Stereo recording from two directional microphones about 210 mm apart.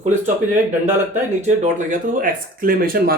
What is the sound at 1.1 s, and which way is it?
Speech, 35° right (ahead or behind).